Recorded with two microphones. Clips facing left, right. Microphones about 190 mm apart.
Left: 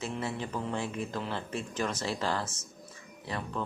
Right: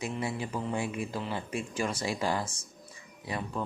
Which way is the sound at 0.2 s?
10° right (ahead or behind).